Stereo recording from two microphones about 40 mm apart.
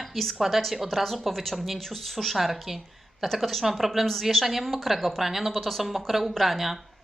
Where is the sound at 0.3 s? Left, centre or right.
Centre.